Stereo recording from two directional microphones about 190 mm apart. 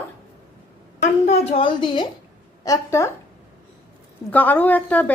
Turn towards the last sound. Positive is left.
turn(degrees=10)  # may be behind; listen again after turning